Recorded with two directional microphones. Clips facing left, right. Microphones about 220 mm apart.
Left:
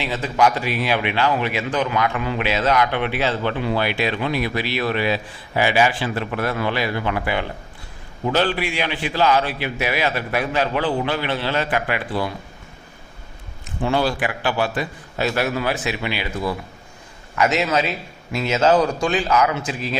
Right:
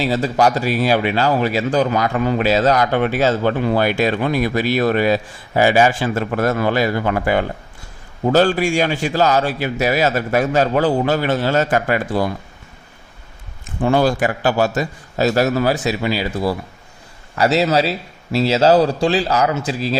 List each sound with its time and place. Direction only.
0.0 s speech: 40° right (ahead or behind)
13.8 s a man's voice: 45° right (ahead or behind)